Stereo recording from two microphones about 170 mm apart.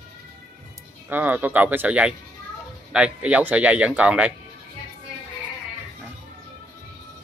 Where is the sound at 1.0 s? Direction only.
10° right (ahead or behind).